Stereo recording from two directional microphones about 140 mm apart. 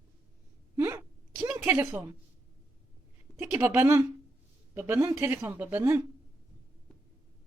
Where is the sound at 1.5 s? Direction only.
15° right (ahead or behind).